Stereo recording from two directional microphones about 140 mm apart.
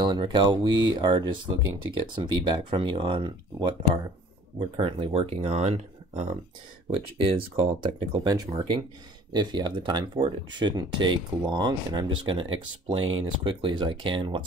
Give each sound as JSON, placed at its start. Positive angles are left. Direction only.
{"t": 0.0, "sound": "speech", "side_deg": -35}
{"t": 8.3, "sound": "speech", "side_deg": -30}